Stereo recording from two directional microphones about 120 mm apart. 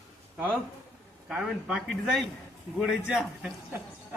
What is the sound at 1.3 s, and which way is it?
Speech, 5° right (ahead or behind).